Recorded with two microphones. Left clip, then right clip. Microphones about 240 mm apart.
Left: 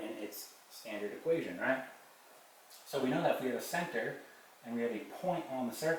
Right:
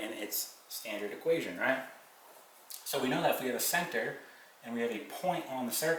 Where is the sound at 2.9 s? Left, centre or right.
Centre.